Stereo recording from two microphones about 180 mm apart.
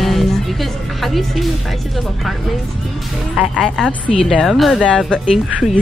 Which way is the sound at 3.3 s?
Centre (ahead or behind).